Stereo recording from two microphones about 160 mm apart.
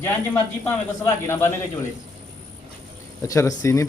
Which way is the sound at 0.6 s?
15° left (ahead or behind).